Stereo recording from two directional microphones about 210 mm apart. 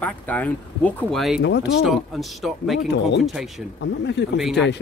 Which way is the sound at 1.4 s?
55° left (ahead or behind).